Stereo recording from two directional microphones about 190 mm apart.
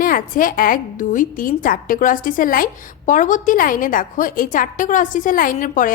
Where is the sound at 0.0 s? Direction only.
45° left (ahead or behind).